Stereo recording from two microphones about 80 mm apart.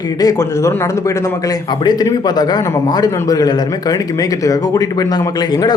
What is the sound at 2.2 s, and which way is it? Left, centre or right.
A man's voice, left.